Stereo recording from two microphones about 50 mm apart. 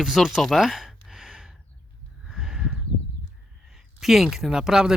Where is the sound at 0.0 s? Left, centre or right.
Centre.